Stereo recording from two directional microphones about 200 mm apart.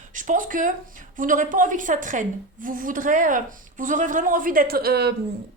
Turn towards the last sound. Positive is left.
turn(degrees=-55)  # may be behind; listen again after turning